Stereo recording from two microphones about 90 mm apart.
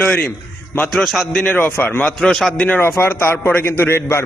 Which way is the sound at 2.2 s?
5° left (ahead or behind).